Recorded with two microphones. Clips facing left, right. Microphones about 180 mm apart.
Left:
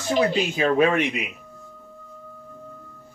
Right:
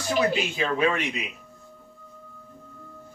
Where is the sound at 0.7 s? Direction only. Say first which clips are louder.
Left 5 dB; 50° left (ahead or behind).